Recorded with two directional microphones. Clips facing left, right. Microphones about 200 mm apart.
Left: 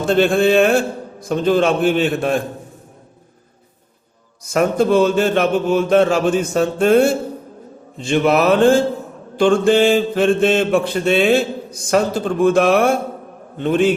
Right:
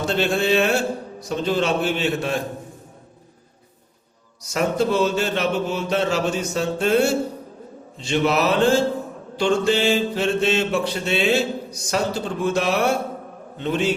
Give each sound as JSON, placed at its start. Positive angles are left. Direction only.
{"t": 0.0, "sound": "mantra", "side_deg": 50}
{"t": 4.4, "sound": "mantra", "side_deg": 50}